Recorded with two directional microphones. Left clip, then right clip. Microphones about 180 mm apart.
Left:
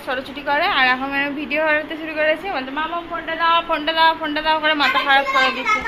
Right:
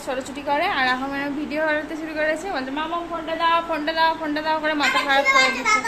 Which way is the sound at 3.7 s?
10° right (ahead or behind).